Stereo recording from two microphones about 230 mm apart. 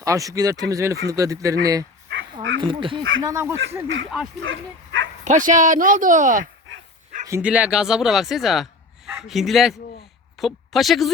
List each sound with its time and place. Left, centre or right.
0.0 s speech: centre
2.0 s dog: right
2.6 s speech: right
4.4 s speech: right
5.2 s speech: right
7.3 s a man's voice: centre